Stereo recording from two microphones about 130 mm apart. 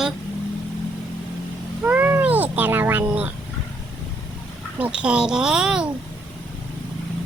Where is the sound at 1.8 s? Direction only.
15° right (ahead or behind).